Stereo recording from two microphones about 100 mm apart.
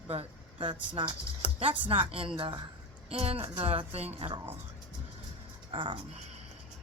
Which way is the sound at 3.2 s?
80° right.